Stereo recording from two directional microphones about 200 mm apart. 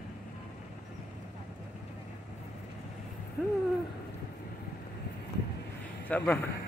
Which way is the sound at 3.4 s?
5° right (ahead or behind).